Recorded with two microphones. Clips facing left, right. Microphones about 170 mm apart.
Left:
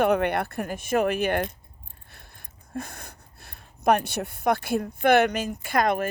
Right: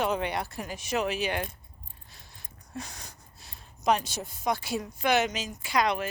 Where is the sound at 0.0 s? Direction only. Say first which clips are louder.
Left 7 dB; 55° left (ahead or behind).